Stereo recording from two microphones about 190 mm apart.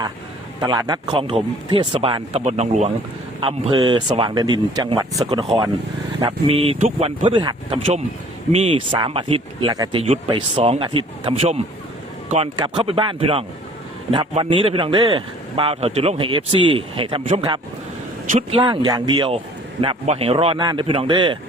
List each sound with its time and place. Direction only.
0.6 s speech: 20° right (ahead or behind)
18.3 s speech: 35° right (ahead or behind)